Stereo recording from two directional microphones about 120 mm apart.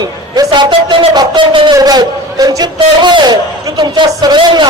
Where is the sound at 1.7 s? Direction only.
35° right (ahead or behind).